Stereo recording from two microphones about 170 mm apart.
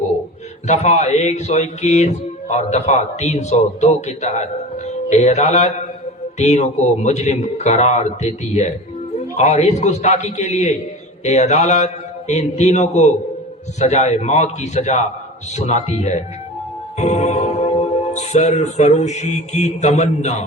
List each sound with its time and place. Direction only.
0.7 s speech: 45° left (ahead or behind)